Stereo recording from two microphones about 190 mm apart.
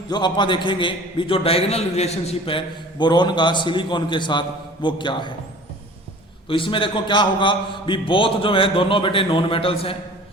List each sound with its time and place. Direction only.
0.1 s a man's voice: 25° left (ahead or behind)
6.5 s a man's voice: 25° left (ahead or behind)